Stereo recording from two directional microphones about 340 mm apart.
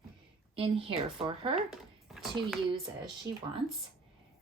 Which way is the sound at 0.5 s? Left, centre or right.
Centre.